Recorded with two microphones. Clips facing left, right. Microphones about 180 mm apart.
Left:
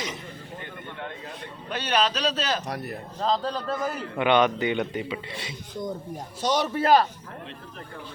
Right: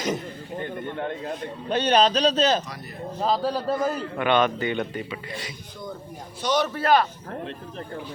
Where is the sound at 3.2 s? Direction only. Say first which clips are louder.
Right 2 dB; 10° right (ahead or behind).